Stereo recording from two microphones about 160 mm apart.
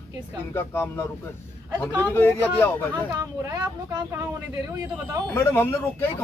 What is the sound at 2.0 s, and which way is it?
Speech, 15° left (ahead or behind).